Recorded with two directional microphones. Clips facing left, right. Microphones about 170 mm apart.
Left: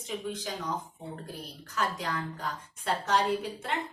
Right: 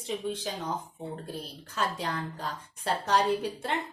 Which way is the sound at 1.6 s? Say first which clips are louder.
Even; 30° right (ahead or behind).